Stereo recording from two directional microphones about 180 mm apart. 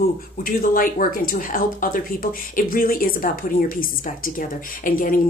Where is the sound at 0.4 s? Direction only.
55° left (ahead or behind).